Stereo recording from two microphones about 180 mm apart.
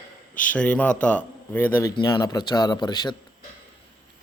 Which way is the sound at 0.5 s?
5° left (ahead or behind).